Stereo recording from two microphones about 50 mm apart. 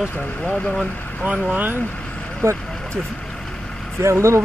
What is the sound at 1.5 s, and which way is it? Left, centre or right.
Speech, right.